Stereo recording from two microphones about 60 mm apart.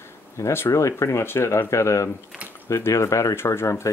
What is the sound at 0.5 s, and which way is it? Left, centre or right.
Speech, left.